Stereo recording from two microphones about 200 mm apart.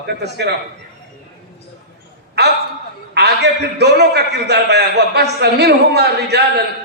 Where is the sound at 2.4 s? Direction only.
55° right (ahead or behind).